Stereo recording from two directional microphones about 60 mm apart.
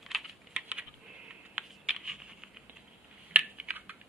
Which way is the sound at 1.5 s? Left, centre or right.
Centre.